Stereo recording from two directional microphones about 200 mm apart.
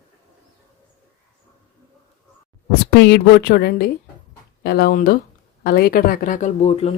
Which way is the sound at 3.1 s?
50° left (ahead or behind).